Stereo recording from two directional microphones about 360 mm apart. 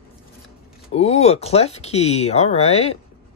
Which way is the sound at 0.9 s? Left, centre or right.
Centre.